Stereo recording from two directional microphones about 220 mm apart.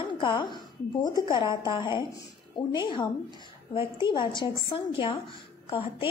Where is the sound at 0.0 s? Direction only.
20° left (ahead or behind).